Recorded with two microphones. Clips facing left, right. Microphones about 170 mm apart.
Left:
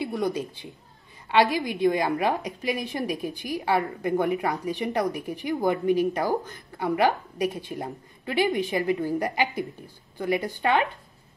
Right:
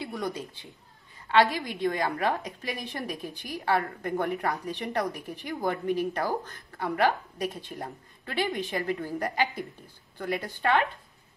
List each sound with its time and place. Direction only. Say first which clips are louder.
0.0 s a woman's voice: left 6 dB; 10° left (ahead or behind)